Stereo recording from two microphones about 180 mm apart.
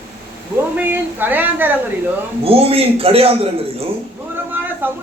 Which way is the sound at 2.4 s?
30° right (ahead or behind).